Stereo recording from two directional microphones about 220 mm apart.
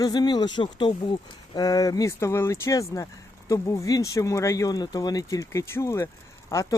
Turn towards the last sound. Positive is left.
turn(degrees=15)  # may be behind; listen again after turning